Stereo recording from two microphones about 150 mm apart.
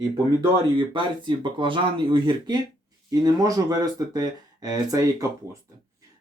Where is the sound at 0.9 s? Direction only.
35° right (ahead or behind).